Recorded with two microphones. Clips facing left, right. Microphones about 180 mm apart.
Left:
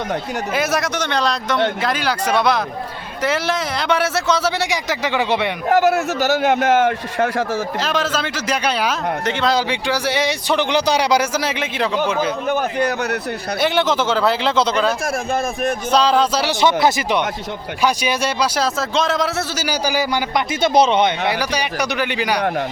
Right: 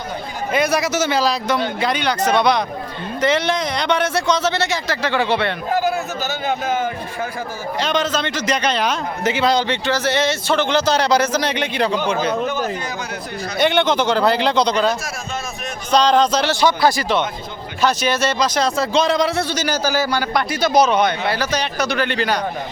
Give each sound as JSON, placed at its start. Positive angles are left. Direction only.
{"t": 0.5, "sound": "a man's voice", "side_deg": 0}
{"t": 5.6, "sound": "a man's voice", "side_deg": 75}
{"t": 7.8, "sound": "a man's voice", "side_deg": 5}
{"t": 9.2, "sound": "speech", "side_deg": -5}
{"t": 9.6, "sound": "a man's voice", "side_deg": 10}
{"t": 12.5, "sound": "speech", "side_deg": 60}
{"t": 13.6, "sound": "a man's voice", "side_deg": 0}
{"t": 16.6, "sound": "a man's voice", "side_deg": 20}
{"t": 21.3, "sound": "a man's voice", "side_deg": 10}